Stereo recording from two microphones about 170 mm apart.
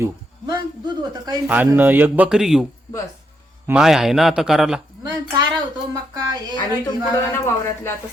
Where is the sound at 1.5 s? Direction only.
10° right (ahead or behind).